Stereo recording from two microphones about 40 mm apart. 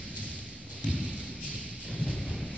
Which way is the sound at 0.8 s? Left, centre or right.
Left.